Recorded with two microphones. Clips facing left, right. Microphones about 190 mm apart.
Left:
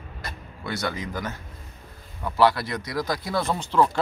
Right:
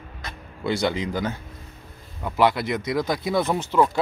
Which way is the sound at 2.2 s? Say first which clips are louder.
Even; 20° right (ahead or behind).